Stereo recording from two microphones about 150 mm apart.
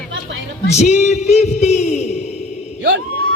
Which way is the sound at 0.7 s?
50° left (ahead or behind).